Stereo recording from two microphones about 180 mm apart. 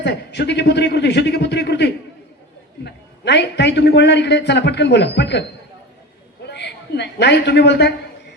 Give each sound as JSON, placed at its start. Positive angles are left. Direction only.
{"t": 0.0, "sound": "a man's voice", "side_deg": 70}